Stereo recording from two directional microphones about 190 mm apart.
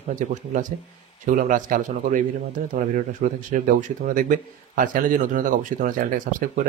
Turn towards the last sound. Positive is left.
turn(degrees=-45)  # may be behind; listen again after turning